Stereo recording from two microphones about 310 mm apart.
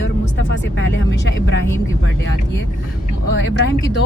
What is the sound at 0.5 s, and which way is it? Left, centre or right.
Music, left.